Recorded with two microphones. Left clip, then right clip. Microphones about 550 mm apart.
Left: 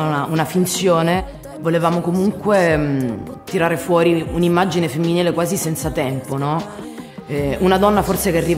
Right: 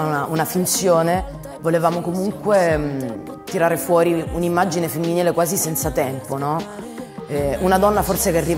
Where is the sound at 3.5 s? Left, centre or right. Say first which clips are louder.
Even; left.